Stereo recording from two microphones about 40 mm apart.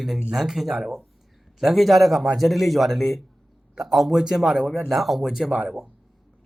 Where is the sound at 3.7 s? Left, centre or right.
Centre.